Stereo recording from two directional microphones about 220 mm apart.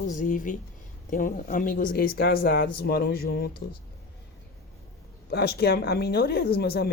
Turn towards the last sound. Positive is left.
turn(degrees=45)  # may be behind; listen again after turning